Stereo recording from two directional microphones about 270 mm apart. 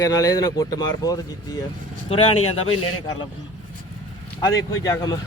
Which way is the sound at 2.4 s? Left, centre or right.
Left.